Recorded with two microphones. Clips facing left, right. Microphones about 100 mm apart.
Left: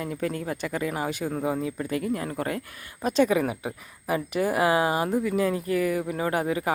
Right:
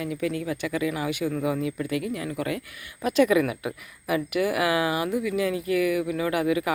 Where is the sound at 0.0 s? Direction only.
40° left (ahead or behind).